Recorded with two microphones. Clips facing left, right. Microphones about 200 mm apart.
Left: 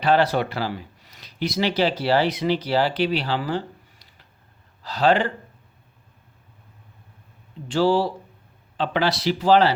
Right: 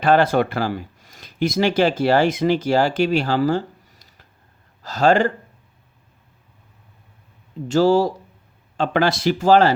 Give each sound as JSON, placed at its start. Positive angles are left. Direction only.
{"t": 0.0, "sound": "speech", "side_deg": -50}
{"t": 7.7, "sound": "speech", "side_deg": -45}